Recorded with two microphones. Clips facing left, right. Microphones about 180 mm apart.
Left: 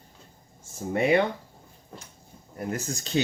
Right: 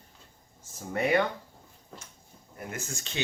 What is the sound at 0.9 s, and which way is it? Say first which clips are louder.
Speech: left 4 dB; 25° left (ahead or behind).